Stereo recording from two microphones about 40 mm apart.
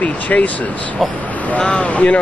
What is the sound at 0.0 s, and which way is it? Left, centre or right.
Speech, left.